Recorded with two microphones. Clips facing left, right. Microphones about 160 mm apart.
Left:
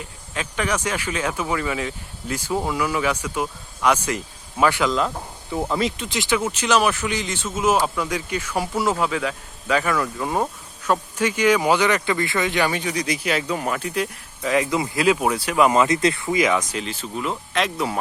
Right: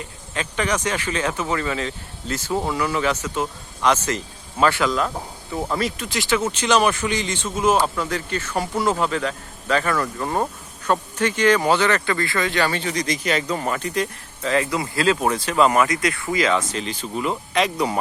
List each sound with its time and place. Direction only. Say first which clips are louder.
0.0 s speech: right 1 dB; 5° left (ahead or behind)
5.8 s speech: left 1 dB; 20° left (ahead or behind)
6.5 s speech: right 1 dB; 5° left (ahead or behind)
16.8 s speech: right 2 dB; centre (ahead or behind)